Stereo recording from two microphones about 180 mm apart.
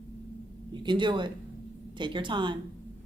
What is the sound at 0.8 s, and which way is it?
Speech, 25° right (ahead or behind).